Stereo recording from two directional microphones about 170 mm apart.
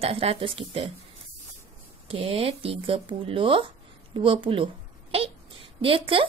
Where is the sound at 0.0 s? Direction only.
35° right (ahead or behind).